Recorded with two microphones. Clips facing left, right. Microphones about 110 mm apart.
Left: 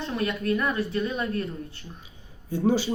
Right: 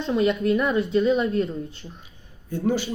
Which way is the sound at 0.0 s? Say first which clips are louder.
Right 7 dB; 20° right (ahead or behind).